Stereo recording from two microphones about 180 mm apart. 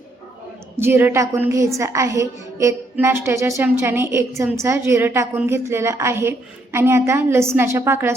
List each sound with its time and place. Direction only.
0.8 s a woman's voice: 15° right (ahead or behind)